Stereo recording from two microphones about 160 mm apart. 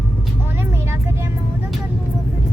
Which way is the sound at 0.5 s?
15° right (ahead or behind).